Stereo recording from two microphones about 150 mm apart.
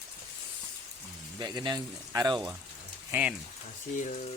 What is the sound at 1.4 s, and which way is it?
Speech, 30° right (ahead or behind).